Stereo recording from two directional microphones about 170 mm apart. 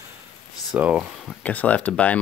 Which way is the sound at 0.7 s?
5° right (ahead or behind).